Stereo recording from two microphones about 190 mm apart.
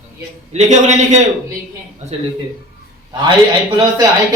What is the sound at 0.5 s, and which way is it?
Speech, 40° right (ahead or behind).